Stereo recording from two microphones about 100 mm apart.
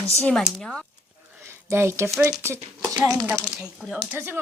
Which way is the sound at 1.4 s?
25° right (ahead or behind).